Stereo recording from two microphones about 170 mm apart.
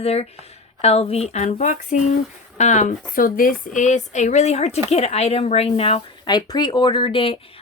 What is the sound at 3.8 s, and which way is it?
A woman's voice, 45° left (ahead or behind).